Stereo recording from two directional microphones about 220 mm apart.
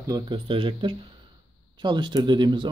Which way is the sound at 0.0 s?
20° right (ahead or behind).